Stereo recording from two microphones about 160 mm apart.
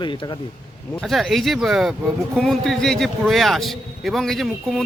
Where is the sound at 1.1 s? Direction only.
Centre (ahead or behind).